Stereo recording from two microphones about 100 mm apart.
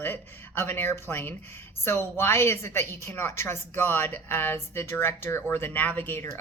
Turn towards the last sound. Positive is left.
turn(degrees=20)  # may be behind; listen again after turning